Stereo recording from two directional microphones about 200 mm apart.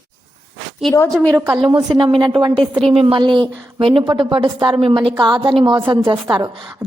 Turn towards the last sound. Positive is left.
turn(degrees=-20)  # may be behind; listen again after turning